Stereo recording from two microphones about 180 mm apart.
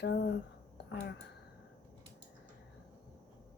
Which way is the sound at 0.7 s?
70° left (ahead or behind).